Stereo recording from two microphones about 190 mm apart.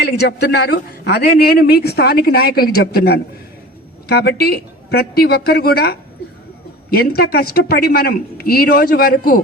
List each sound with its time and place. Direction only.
0.0 s a man's voice: 55° left (ahead or behind)